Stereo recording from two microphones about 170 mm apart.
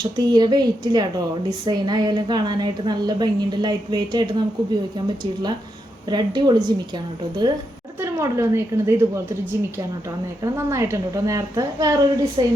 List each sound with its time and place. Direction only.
0.0 s a woman's voice: 25° right (ahead or behind)